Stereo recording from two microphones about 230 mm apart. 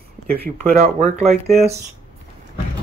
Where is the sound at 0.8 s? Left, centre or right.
Right.